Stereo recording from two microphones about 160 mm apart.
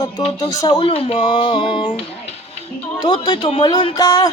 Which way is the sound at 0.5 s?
25° left (ahead or behind).